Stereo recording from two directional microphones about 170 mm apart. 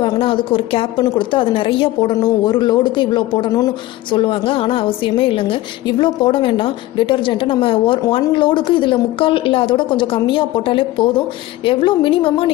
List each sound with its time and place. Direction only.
0.0 s a woman's voice: 30° left (ahead or behind)